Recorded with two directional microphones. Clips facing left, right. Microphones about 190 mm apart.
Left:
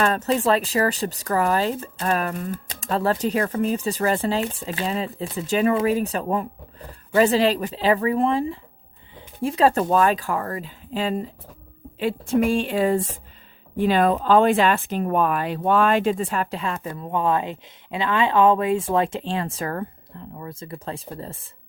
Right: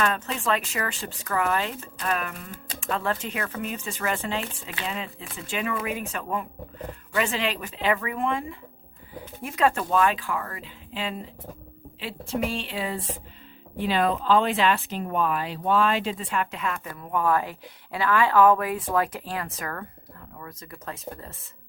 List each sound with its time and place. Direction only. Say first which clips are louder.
0.0 s a woman's voice: left 6 dB; 40° left (ahead or behind)